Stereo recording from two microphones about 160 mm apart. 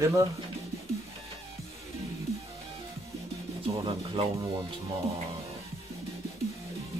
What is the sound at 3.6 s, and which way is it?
Speech, 35° right (ahead or behind).